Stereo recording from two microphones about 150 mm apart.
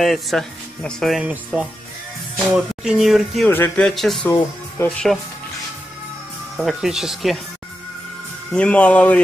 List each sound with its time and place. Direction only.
0.0 s speech: centre (ahead or behind)
3.4 s a man's voice: 15° left (ahead or behind)
6.6 s speech: centre (ahead or behind)
8.5 s a man's voice: 10° left (ahead or behind)